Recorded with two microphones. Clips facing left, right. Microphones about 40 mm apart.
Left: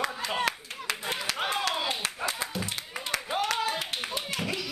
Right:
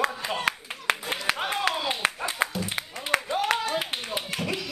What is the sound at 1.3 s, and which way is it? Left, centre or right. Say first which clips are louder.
Clapping: right 4 dB; right.